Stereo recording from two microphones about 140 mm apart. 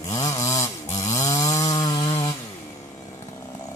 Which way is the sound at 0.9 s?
55° left (ahead or behind).